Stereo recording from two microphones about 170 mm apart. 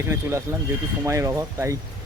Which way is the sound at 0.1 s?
15° right (ahead or behind).